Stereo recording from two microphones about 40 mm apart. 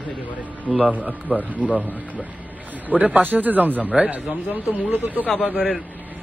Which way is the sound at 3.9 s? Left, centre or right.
Right.